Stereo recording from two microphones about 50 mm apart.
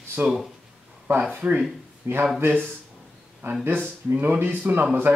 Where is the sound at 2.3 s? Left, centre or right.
Right.